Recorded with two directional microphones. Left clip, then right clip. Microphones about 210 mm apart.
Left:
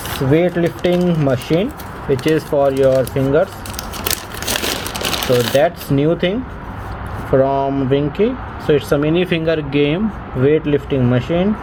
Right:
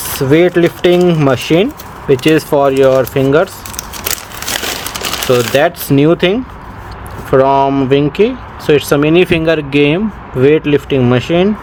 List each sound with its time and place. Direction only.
0.2 s speech: 55° right (ahead or behind)
5.3 s speech: 50° right (ahead or behind)